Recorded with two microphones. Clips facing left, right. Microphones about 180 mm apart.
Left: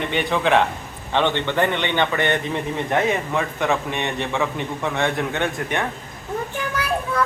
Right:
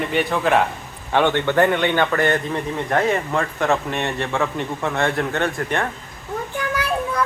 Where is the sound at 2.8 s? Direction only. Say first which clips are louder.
Right 2 dB; 5° left (ahead or behind).